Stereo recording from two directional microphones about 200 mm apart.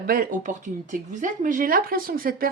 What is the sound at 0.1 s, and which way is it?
Speech, 45° right (ahead or behind).